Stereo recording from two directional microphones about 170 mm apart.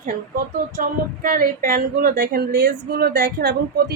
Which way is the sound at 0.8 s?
55° right (ahead or behind).